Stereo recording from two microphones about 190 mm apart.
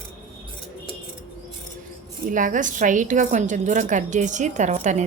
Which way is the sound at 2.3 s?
45° right (ahead or behind).